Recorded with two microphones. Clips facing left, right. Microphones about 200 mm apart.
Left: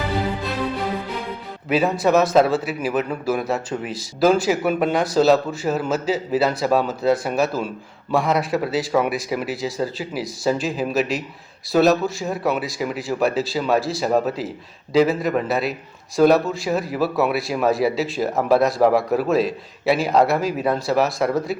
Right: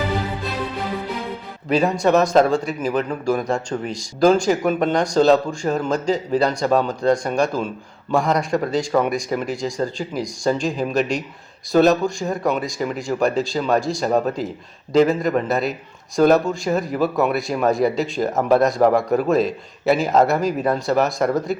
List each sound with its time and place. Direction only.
1.7 s speech: centre (ahead or behind)